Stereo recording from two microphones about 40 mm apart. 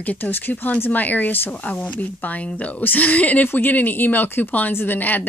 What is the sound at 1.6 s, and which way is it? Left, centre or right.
Speech, left.